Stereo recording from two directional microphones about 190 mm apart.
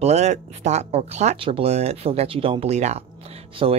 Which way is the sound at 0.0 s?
35° right (ahead or behind).